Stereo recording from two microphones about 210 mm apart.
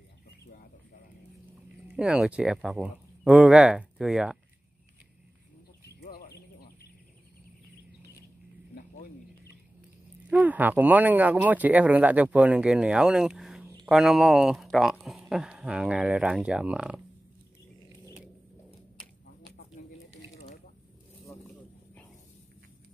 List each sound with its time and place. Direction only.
1.9 s speech: 5° right (ahead or behind)
5.9 s horse: 50° left (ahead or behind)
10.3 s speech: 10° right (ahead or behind)